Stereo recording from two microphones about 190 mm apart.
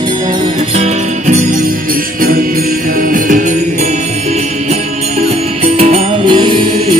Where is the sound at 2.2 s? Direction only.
50° right (ahead or behind).